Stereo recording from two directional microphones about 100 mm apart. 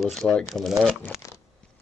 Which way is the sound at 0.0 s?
5° left (ahead or behind).